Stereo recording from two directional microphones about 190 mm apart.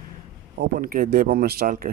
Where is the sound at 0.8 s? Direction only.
50° right (ahead or behind).